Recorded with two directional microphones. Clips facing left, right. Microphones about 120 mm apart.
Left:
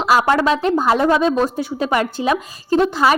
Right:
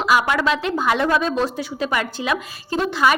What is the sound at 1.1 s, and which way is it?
Speech, 20° left (ahead or behind).